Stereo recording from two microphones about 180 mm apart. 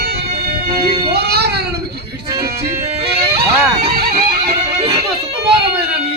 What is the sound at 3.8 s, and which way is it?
Music, 35° right (ahead or behind).